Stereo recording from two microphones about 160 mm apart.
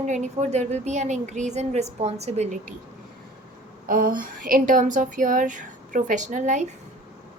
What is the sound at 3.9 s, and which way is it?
Speech, 65° right (ahead or behind).